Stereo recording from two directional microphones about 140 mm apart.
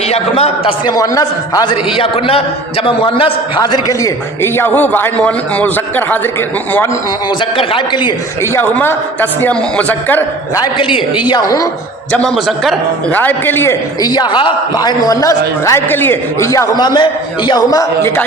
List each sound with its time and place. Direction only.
0.1 s a man's voice: 45° left (ahead or behind)
0.9 s a man's voice: 25° left (ahead or behind)
2.0 s a man's voice: 45° left (ahead or behind); by 6.1 s 10° left (ahead or behind)
7.5 s a man's voice: 40° left (ahead or behind)
8.5 s a man's voice: 15° left (ahead or behind)
10.5 s a man's voice: 30° left (ahead or behind)
12.1 s a man's voice: 5° left (ahead or behind)
13.1 s a man's voice: 15° left (ahead or behind)
14.0 s a man's voice: 30° left (ahead or behind)